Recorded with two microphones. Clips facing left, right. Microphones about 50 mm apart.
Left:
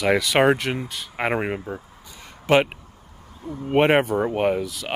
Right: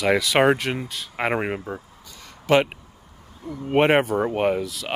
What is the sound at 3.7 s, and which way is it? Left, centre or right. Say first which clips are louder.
Speech: even; centre.